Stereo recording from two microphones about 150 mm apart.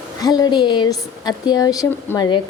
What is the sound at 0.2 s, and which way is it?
A woman's voice, 25° left (ahead or behind).